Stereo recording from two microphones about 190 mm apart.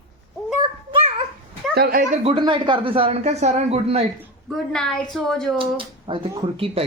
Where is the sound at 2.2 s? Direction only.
25° right (ahead or behind).